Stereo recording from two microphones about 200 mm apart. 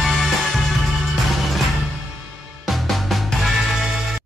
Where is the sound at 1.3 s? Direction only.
Centre (ahead or behind).